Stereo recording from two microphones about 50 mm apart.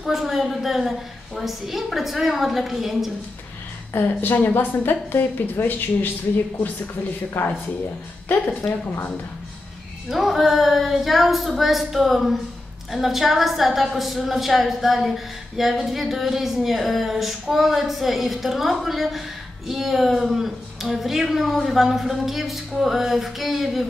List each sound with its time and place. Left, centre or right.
0.0 s a woman's voice: centre
3.9 s a woman's voice: left
7.3 s speech: left
10.0 s a woman's voice: centre